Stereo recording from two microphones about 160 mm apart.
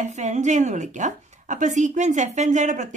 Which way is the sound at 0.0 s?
45° right (ahead or behind).